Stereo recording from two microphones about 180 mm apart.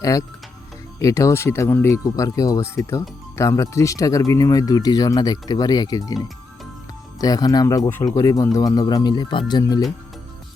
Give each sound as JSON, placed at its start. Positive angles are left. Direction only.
{"t": 0.0, "sound": "speech", "side_deg": 20}
{"t": 7.2, "sound": "speech", "side_deg": 20}